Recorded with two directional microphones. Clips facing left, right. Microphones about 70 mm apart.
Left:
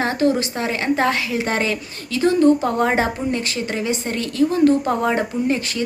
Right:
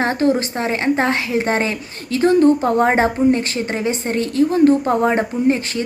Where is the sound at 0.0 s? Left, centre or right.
Right.